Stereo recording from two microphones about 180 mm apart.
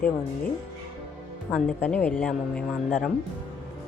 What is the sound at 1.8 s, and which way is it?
Speech, 5° left (ahead or behind).